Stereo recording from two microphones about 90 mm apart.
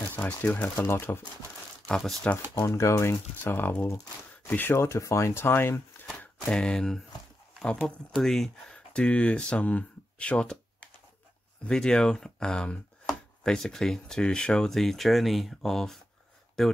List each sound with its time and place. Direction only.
0.1 s speech: 20° left (ahead or behind)
1.9 s speech: 5° left (ahead or behind)
2.5 s speech: 30° left (ahead or behind)
4.7 s speech: 35° left (ahead or behind)
6.0 s a sound: 5° left (ahead or behind)
8.1 s speech: 5° left (ahead or behind)